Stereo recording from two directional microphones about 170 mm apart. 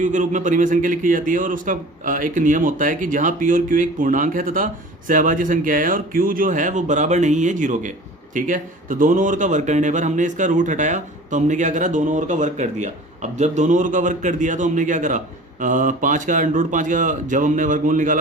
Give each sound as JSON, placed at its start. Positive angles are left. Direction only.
{"t": 0.0, "sound": "a man's voice", "side_deg": -45}